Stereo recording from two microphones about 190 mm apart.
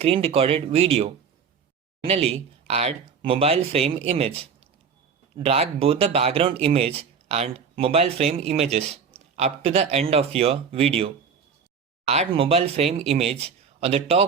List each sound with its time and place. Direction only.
0.0 s speech: 30° right (ahead or behind)